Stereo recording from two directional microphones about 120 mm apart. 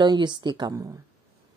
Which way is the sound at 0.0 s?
40° right (ahead or behind).